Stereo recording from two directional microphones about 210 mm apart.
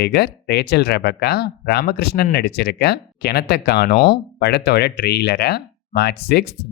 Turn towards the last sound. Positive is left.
turn(degrees=50)  # may be behind; listen again after turning